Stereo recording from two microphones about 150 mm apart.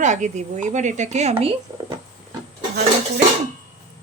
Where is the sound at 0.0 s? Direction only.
55° right (ahead or behind).